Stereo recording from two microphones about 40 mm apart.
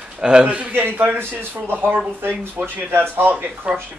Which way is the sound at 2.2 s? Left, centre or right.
Right.